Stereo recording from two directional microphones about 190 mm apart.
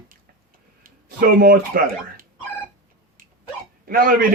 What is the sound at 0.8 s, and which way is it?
Speech, 50° right (ahead or behind).